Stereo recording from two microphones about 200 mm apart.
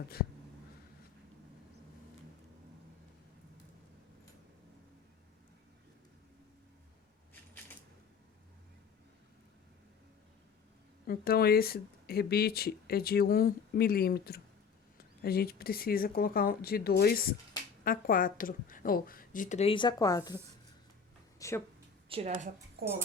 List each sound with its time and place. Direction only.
11.0 s speech: 50° left (ahead or behind); by 20.4 s 20° left (ahead or behind)
21.3 s a sound: 15° left (ahead or behind)
22.1 s a woman's voice: 30° right (ahead or behind)
22.8 s speech: 50° right (ahead or behind)